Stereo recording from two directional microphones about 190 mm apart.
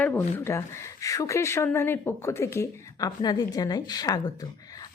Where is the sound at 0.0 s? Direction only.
10° left (ahead or behind).